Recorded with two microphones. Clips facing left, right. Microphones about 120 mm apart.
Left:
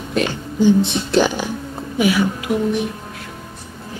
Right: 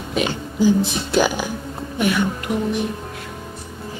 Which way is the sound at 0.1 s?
5° right (ahead or behind).